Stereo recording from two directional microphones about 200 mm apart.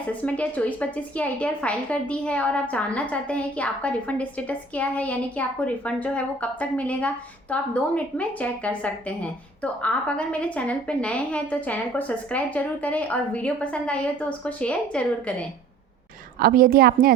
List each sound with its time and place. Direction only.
0.1 s a woman's voice: 5° left (ahead or behind)
16.4 s a woman's voice: 45° right (ahead or behind)